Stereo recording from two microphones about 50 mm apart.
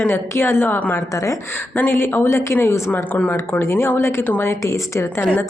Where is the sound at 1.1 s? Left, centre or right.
Left.